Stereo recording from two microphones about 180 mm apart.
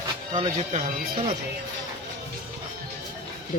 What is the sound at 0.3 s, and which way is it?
Speech, 35° right (ahead or behind).